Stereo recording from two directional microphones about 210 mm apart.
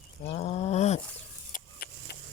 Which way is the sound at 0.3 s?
30° left (ahead or behind).